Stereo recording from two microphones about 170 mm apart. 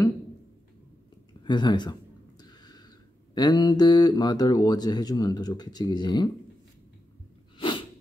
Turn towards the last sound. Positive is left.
turn(degrees=30)  # may be behind; listen again after turning